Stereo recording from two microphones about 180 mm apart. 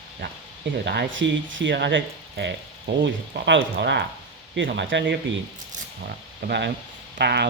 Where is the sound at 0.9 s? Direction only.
80° right.